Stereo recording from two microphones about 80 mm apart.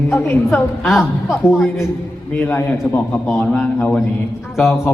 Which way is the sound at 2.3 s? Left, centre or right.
Left.